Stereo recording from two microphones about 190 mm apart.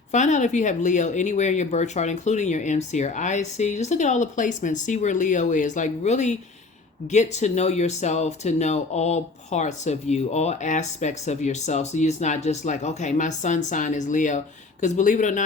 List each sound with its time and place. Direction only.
0.1 s speech: 40° left (ahead or behind)